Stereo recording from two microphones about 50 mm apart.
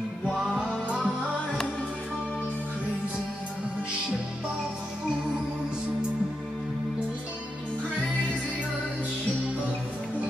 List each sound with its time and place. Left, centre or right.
0.4 s music: centre